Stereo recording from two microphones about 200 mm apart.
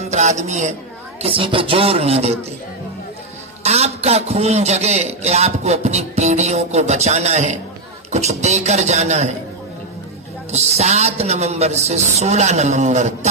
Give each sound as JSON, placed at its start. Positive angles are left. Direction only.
{"t": 0.1, "sound": "a man's voice", "side_deg": -35}
{"t": 3.6, "sound": "a man's voice", "side_deg": -30}
{"t": 10.5, "sound": "a man's voice", "side_deg": -35}